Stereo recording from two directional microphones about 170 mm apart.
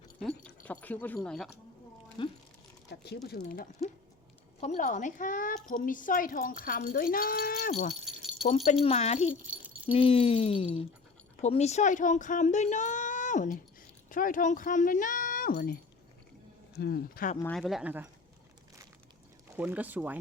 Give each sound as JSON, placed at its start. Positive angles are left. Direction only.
{"t": 0.2, "sound": "dog", "side_deg": 5}
{"t": 2.2, "sound": "speech", "side_deg": 30}
{"t": 2.9, "sound": "speech", "side_deg": 75}
{"t": 4.6, "sound": "speech", "side_deg": 45}
{"t": 8.0, "sound": "rattle", "side_deg": 0}
{"t": 8.4, "sound": "speech", "side_deg": 45}
{"t": 9.3, "sound": "keys jangling", "side_deg": -10}
{"t": 9.9, "sound": "speech", "side_deg": 35}
{"t": 17.4, "sound": "speech", "side_deg": 0}
{"t": 19.5, "sound": "speech", "side_deg": -10}